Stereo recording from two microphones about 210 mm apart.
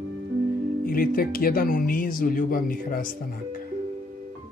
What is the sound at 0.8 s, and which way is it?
Speech, 45° left (ahead or behind).